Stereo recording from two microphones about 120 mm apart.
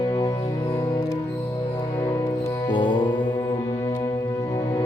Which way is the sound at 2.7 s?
40° left (ahead or behind).